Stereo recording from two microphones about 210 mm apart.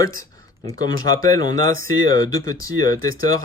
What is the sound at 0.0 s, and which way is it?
Speech, 15° left (ahead or behind).